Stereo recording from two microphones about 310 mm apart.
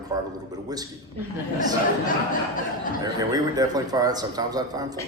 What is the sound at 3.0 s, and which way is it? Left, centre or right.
Speech, centre.